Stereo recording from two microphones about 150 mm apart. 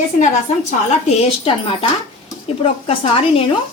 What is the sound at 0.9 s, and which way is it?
A woman's voice, 45° left (ahead or behind).